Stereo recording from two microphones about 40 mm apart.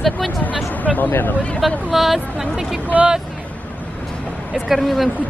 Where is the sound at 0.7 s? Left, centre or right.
Left.